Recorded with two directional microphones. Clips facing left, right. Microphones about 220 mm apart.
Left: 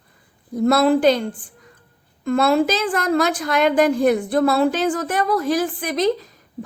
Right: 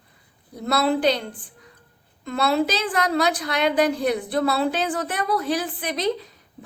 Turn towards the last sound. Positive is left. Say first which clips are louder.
# left 5 dB
turn(degrees=45)  # may be behind; listen again after turning